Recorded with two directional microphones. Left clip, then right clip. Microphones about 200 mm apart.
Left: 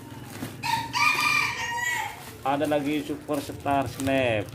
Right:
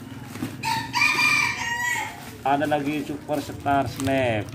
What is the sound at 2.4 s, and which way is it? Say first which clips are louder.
Speech: right 3 dB; 20° left (ahead or behind).